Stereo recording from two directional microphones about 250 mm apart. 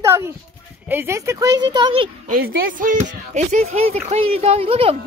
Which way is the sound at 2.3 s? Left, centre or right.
Right.